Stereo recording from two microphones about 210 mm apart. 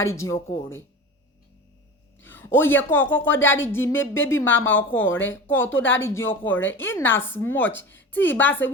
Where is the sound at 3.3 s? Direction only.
65° left (ahead or behind).